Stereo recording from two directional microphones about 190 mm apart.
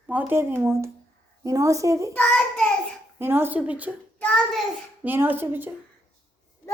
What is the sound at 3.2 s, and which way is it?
Speech, 10° right (ahead or behind).